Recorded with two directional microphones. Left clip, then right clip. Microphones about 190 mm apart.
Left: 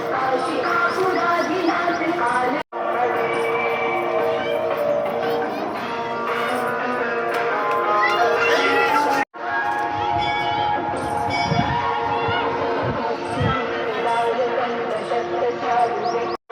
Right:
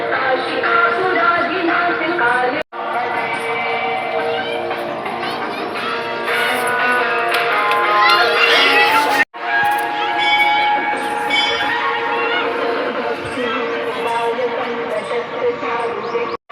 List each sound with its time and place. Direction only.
7.3 s music: 35° left (ahead or behind)